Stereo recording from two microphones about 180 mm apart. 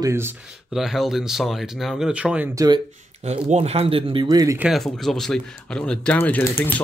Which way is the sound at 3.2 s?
35° right (ahead or behind).